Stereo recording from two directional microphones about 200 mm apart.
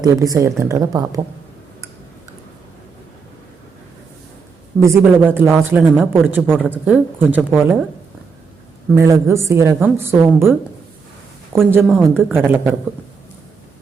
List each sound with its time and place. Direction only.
0.0 s speech: 15° right (ahead or behind)
4.8 s speech: 15° right (ahead or behind)
9.0 s speech: 15° right (ahead or behind)
11.6 s speech: 10° right (ahead or behind)